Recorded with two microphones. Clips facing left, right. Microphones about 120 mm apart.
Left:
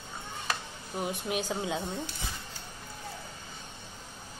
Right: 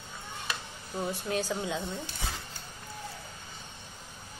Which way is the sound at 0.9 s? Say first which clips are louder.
Right 1 dB; 20° left (ahead or behind).